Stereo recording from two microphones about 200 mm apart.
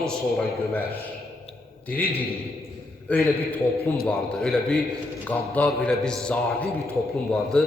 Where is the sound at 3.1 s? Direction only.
5° left (ahead or behind).